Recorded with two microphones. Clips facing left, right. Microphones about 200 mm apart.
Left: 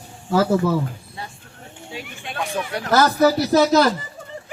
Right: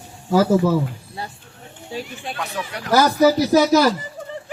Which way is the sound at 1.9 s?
35° right (ahead or behind).